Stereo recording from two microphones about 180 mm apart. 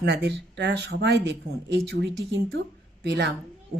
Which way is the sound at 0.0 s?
65° right (ahead or behind).